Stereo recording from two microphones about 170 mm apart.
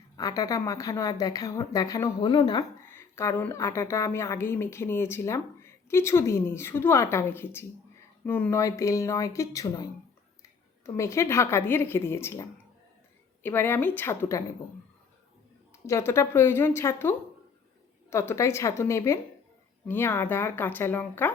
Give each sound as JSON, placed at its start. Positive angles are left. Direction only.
{"t": 0.2, "sound": "a woman's voice", "side_deg": 20}
{"t": 15.7, "sound": "a woman's voice", "side_deg": 15}